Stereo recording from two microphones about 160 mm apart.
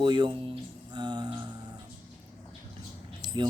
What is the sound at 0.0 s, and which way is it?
Speech, 30° right (ahead or behind).